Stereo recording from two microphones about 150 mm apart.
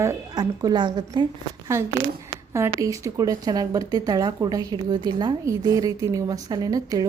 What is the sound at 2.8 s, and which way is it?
Speech, 20° right (ahead or behind).